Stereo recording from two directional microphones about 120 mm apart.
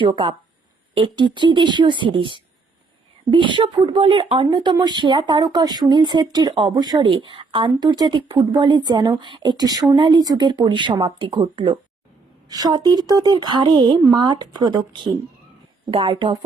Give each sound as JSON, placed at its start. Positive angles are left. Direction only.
{"t": 0.0, "sound": "speech", "side_deg": -45}